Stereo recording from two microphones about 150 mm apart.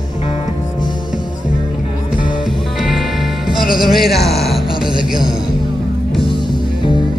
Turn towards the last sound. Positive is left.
turn(degrees=-30)  # may be behind; listen again after turning